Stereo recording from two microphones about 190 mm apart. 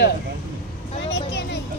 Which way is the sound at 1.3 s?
65° left (ahead or behind).